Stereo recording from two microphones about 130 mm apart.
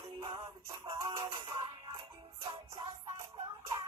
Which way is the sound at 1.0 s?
25° right (ahead or behind).